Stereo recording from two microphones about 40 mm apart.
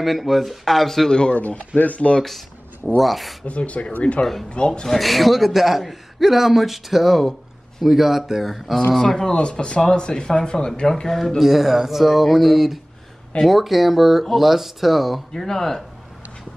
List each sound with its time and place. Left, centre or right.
0.0 s a man's voice: centre
1.1 s speech: left
1.8 s speech: left
2.2 s a sound: centre
3.0 s a man's voice: centre
3.4 s speech: left
4.8 s a man's voice: centre
8.9 s speech: centre
10.9 s speech: centre
11.3 s a man's voice: centre
15.3 s speech: centre